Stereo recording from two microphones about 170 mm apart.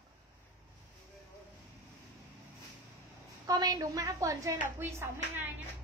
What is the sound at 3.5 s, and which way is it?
A woman's voice, 20° right (ahead or behind).